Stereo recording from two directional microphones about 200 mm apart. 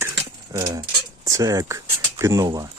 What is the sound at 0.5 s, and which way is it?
Speech, 20° right (ahead or behind).